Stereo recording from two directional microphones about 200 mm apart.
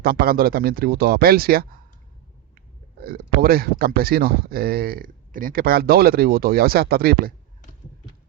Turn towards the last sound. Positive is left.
turn(degrees=-50)  # may be behind; listen again after turning